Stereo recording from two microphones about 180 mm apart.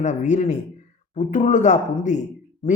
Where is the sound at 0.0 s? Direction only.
45° left (ahead or behind).